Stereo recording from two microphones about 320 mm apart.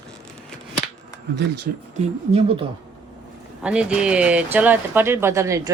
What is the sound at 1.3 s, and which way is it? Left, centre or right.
Speech, right.